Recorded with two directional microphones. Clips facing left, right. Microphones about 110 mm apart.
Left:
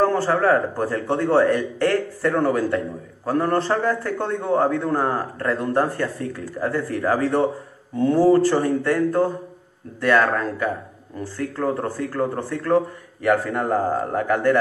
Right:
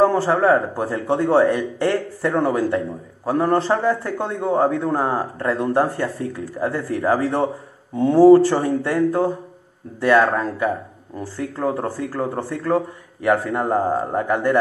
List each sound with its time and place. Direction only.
0.0 s speech: 15° right (ahead or behind)